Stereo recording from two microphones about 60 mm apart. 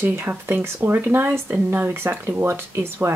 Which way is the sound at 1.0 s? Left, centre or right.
Right.